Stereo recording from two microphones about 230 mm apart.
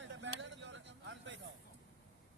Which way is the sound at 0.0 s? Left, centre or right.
Right.